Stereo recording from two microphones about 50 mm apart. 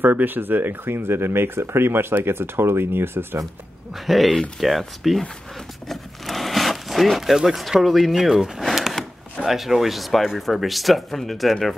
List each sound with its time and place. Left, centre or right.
0.0 s speech: right
3.9 s speech: centre